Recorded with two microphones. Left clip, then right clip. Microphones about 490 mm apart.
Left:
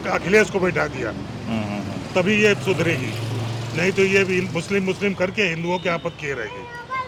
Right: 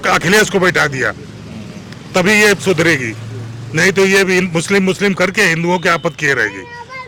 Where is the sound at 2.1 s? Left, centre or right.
Right.